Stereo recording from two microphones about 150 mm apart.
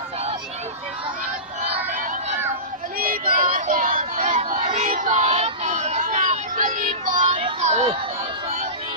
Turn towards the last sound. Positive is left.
turn(degrees=-50)  # may be behind; listen again after turning